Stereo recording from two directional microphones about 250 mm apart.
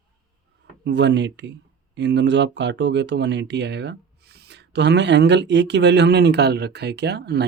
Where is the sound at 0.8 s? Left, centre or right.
Right.